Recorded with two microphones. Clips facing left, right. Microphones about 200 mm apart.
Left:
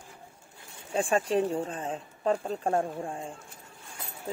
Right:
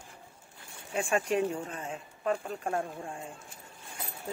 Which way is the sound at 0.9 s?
30° left (ahead or behind).